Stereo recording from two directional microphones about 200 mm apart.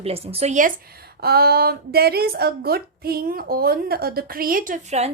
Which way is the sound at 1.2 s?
50° right (ahead or behind).